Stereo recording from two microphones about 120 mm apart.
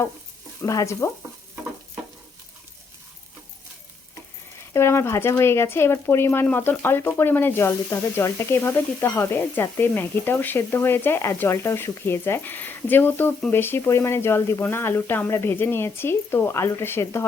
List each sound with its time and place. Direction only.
0.6 s speech: 30° left (ahead or behind)
4.7 s speech: 20° left (ahead or behind)